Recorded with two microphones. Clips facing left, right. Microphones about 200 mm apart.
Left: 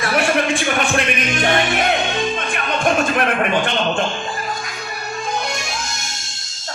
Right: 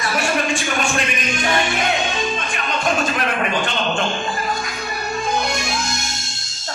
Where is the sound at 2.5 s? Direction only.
55° left (ahead or behind).